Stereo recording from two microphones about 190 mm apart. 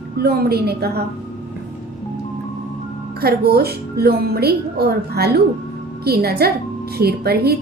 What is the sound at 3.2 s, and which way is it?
A woman's voice, 55° right (ahead or behind).